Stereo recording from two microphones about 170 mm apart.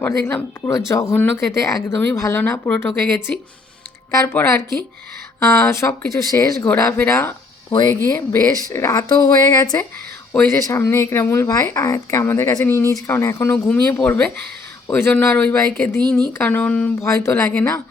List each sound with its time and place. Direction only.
0.0 s speech: 10° left (ahead or behind)
4.1 s speech: 15° left (ahead or behind)